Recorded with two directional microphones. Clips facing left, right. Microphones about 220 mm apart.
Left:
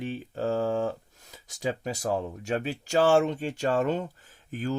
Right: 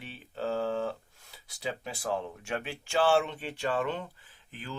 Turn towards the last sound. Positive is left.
turn(degrees=45)  # may be behind; listen again after turning